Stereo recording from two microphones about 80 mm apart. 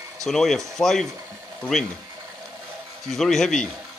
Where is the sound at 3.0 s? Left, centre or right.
Centre.